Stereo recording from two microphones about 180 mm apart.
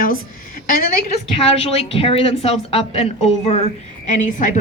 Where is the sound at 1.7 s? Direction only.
35° left (ahead or behind).